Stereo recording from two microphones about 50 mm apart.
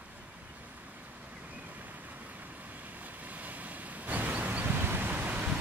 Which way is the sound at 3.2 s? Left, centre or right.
Right.